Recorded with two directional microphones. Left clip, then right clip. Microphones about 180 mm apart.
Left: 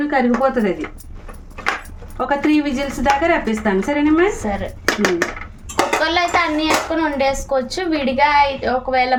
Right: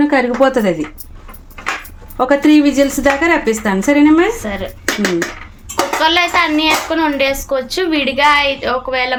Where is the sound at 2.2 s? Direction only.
60° right (ahead or behind).